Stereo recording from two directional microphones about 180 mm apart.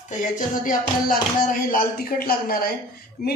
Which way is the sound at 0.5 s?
50° left (ahead or behind).